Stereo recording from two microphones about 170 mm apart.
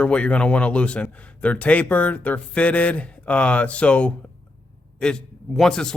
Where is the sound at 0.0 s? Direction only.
5° left (ahead or behind).